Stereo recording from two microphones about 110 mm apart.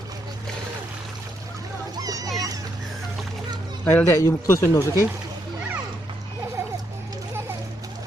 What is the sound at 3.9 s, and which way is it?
Speech, 15° left (ahead or behind).